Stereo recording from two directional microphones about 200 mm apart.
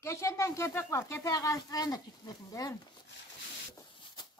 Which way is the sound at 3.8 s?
20° left (ahead or behind).